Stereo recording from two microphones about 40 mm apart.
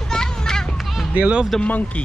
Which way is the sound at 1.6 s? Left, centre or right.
Left.